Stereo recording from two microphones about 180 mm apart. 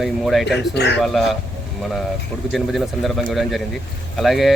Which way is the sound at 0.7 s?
70° left (ahead or behind).